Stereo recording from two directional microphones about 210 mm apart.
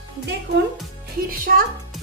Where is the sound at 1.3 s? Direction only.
45° right (ahead or behind).